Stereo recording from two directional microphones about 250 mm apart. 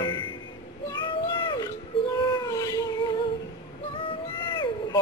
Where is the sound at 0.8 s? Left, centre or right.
Centre.